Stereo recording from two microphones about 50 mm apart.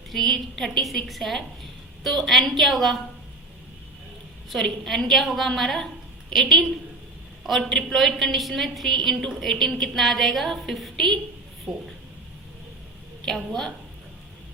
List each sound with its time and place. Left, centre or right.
0.1 s a woman's voice: centre
4.4 s a woman's voice: centre
11.7 s speech: centre
13.2 s a woman's voice: centre